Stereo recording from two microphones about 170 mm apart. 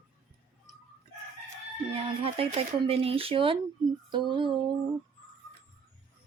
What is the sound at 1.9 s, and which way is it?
Speech, 35° right (ahead or behind).